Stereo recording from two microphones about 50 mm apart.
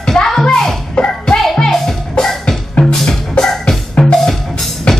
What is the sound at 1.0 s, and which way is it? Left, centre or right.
Music, centre.